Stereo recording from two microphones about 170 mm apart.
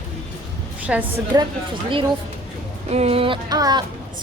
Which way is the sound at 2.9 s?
40° right (ahead or behind).